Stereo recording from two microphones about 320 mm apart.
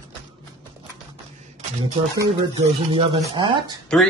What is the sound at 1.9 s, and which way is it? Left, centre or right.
Speech, centre.